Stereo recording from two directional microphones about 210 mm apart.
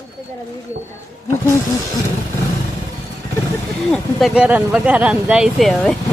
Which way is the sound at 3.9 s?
Centre (ahead or behind).